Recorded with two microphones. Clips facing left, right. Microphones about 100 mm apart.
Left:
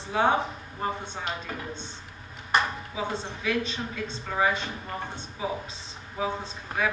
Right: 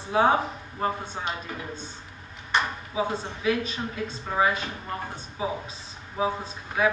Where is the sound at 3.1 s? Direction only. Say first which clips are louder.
Right 2 dB; 5° right (ahead or behind).